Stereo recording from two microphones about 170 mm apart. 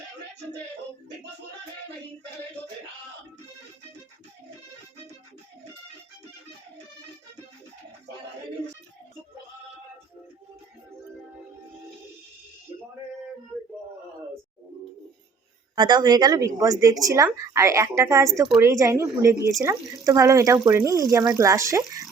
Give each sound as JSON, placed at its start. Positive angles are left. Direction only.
{"t": 15.7, "sound": "a woman's voice", "side_deg": -25}